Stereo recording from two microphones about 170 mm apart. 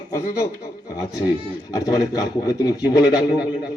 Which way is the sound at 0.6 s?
20° left (ahead or behind).